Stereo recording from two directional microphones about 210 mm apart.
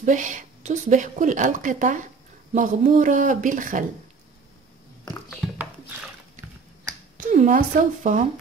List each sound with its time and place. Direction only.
0.0 s a woman's voice: 35° right (ahead or behind)
7.2 s a woman's voice: 35° right (ahead or behind)